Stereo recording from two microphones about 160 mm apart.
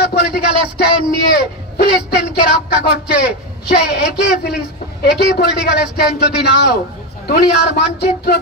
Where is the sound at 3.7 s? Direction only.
90° left.